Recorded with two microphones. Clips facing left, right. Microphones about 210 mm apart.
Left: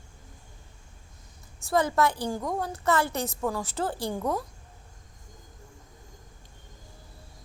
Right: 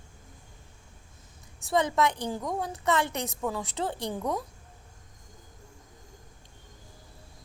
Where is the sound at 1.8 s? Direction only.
15° right (ahead or behind).